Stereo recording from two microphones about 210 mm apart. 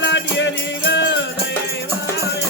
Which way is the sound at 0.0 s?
60° left (ahead or behind).